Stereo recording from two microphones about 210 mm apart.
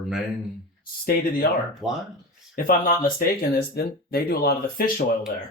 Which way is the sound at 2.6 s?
40° left (ahead or behind).